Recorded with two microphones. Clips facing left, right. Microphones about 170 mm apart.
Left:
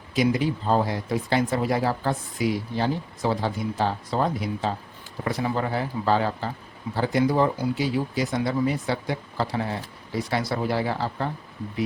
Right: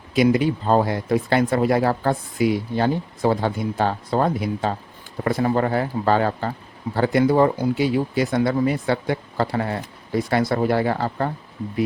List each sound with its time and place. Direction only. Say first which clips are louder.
0.1 s speech: right 5 dB; 65° right (ahead or behind)